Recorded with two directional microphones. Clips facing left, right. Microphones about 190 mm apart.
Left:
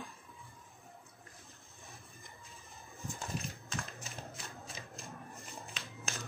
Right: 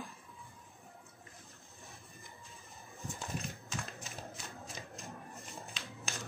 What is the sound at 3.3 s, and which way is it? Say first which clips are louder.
Horse: even; centre (ahead or behind).